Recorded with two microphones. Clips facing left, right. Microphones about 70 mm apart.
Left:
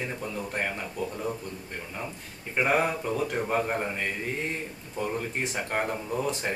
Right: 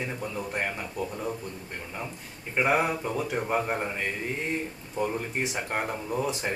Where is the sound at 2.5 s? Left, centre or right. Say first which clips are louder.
Even; centre.